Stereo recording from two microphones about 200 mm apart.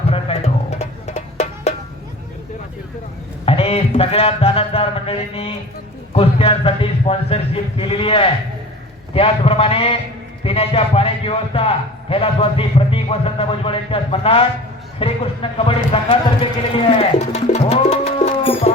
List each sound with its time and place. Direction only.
0.1 s music: 30° left (ahead or behind)
3.4 s a man's voice: 30° left (ahead or behind)
17.0 s music: 35° left (ahead or behind)